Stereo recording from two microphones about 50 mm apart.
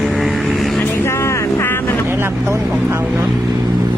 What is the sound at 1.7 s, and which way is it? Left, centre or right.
Vehicle, left.